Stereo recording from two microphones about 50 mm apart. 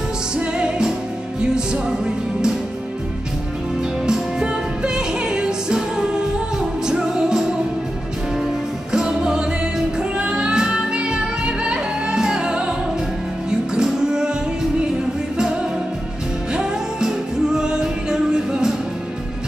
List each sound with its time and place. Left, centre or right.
1.4 s music: centre
4.0 s music: centre
8.9 s music: centre
17.6 s music: centre